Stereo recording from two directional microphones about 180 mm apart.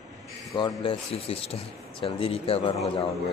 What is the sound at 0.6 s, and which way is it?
Speech, 25° left (ahead or behind).